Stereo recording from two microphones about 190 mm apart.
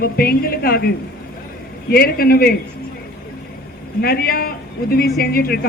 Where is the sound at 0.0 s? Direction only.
50° left (ahead or behind).